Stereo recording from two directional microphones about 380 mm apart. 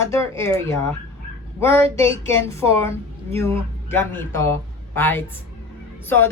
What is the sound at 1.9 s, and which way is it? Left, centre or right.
Speech, centre.